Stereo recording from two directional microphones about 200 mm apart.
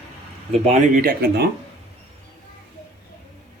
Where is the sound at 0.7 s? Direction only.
40° right (ahead or behind).